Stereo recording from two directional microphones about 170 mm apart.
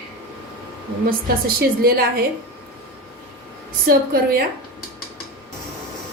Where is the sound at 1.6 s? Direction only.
60° right (ahead or behind).